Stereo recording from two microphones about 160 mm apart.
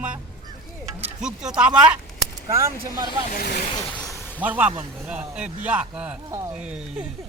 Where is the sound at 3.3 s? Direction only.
65° left (ahead or behind).